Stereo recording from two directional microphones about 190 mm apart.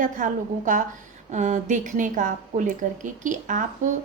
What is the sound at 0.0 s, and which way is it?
A woman's voice, 40° right (ahead or behind).